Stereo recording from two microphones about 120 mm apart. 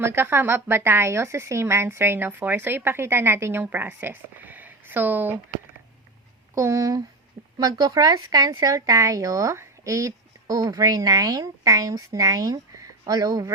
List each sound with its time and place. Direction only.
0.0 s a woman's voice: 20° right (ahead or behind)
6.5 s a woman's voice: 25° right (ahead or behind)